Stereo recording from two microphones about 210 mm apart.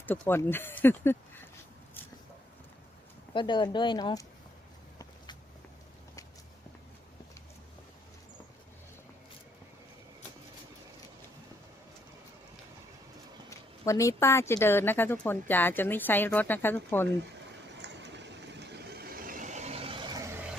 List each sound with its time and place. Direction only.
0.0 s speech: 10° left (ahead or behind)
3.3 s speech: 20° left (ahead or behind)
4.9 s walk: 20° left (ahead or behind)
13.5 s speech: 15° left (ahead or behind)
17.8 s vehicle: 55° right (ahead or behind); by 20.2 s 25° right (ahead or behind)